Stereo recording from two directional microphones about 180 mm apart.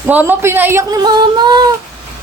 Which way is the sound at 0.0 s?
10° right (ahead or behind).